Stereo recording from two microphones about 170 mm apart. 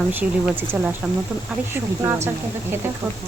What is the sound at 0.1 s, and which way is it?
Speech, 10° right (ahead or behind).